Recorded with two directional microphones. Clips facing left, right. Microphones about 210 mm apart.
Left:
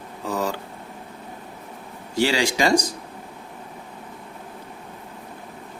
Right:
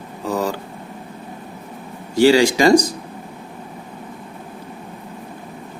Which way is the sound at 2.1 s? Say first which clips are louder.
Right 8 dB; 40° right (ahead or behind).